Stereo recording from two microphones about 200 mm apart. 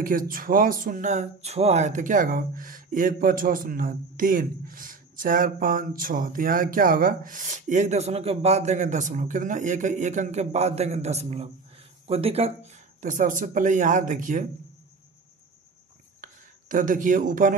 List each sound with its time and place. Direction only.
0.0 s speech: 45° right (ahead or behind)
16.2 s speech: 40° right (ahead or behind)